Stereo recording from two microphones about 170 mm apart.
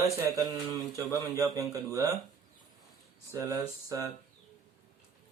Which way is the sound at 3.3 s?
15° right (ahead or behind).